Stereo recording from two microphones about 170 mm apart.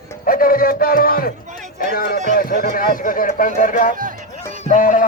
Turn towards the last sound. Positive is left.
turn(degrees=50)  # may be behind; listen again after turning